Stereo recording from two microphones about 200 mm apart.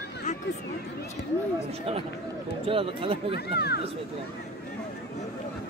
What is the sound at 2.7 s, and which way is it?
Speech, 25° right (ahead or behind).